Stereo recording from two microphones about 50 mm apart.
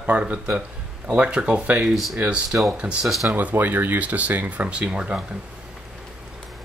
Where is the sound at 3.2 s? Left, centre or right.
Right; by 5.2 s centre.